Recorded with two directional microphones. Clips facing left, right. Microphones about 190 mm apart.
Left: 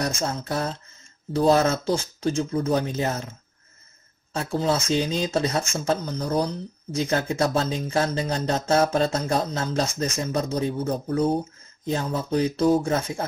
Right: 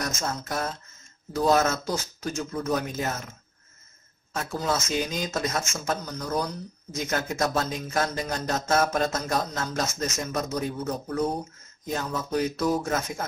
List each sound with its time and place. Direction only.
0.0 s speech: 30° left (ahead or behind)
4.3 s speech: 30° left (ahead or behind)